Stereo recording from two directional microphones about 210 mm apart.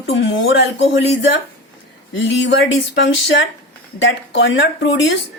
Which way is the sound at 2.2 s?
60° left (ahead or behind).